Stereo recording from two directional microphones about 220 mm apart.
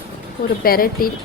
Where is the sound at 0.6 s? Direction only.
40° left (ahead or behind).